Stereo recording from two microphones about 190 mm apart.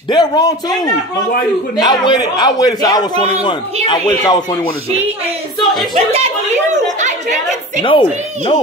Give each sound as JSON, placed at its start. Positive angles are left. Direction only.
{"t": 0.1, "sound": "a man's voice", "side_deg": 20}
{"t": 5.9, "sound": "speech", "side_deg": -35}
{"t": 7.8, "sound": "a man's voice", "side_deg": 25}